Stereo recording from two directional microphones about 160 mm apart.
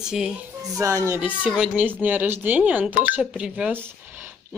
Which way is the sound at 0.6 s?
20° right (ahead or behind).